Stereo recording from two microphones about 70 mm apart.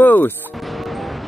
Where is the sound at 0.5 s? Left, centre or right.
Centre.